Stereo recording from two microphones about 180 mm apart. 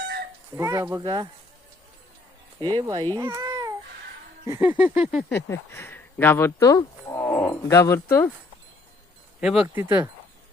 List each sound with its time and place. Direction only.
0.5 s speech: 15° right (ahead or behind)
2.6 s speech: 25° right (ahead or behind)
3.2 s a sound: 20° right (ahead or behind)
4.4 s speech: 15° right (ahead or behind)
5.5 s speech: 15° left (ahead or behind)
9.4 s speech: 5° right (ahead or behind)